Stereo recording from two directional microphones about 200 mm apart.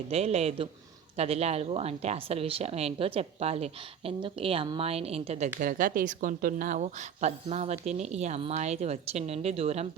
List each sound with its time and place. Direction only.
0.1 s speech: 30° right (ahead or behind)
5.5 s speech: 40° right (ahead or behind)